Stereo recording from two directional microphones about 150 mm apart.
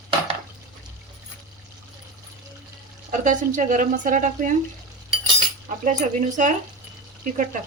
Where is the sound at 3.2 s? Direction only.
60° right (ahead or behind).